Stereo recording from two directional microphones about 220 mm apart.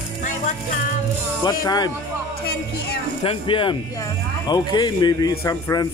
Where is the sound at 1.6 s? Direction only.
20° left (ahead or behind).